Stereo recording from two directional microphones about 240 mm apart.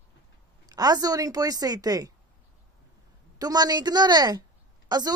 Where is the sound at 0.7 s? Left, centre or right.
Centre.